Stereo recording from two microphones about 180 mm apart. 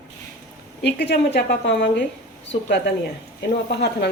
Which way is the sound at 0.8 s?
70° left (ahead or behind).